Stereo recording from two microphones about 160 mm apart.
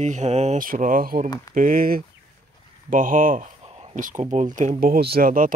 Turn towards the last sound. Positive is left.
turn(degrees=-60)  # may be behind; listen again after turning